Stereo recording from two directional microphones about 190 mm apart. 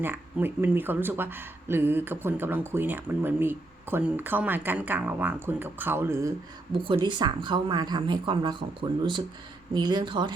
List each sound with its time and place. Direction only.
0.0 s speech: 10° right (ahead or behind)
6.7 s speech: 25° right (ahead or behind)